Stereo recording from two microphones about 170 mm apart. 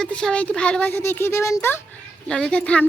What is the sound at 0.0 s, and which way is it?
A child's voice, 5° left (ahead or behind).